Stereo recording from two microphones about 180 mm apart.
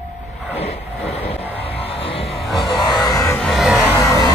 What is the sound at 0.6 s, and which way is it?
Vehicle, 35° left (ahead or behind).